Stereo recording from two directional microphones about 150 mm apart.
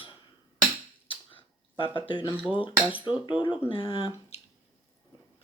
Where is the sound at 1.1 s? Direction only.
35° left (ahead or behind).